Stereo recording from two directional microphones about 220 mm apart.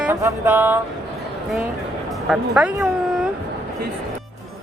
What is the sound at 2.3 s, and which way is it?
Speech, 5° right (ahead or behind).